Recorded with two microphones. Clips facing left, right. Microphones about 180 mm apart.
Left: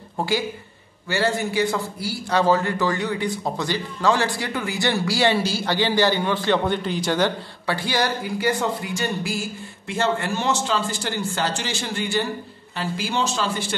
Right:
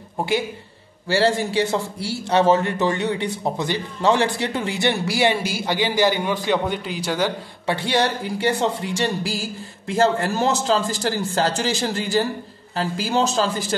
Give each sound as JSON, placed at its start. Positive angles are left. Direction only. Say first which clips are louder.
{"t": 1.0, "sound": "a man's voice", "louder": "right 4 dB", "side_deg": -30}
{"t": 7.6, "sound": "a man's voice", "louder": "right 3 dB", "side_deg": -25}